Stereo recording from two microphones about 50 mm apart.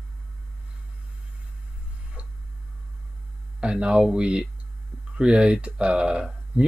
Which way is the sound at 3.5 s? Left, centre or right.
Centre.